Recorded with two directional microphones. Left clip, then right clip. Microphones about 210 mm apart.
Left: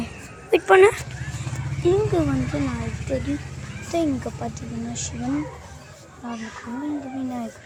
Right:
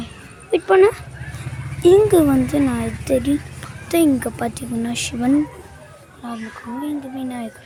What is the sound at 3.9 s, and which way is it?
Speech, 40° right (ahead or behind).